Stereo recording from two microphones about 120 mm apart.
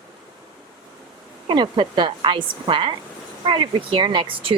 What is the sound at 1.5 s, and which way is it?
A woman's voice, 40° right (ahead or behind).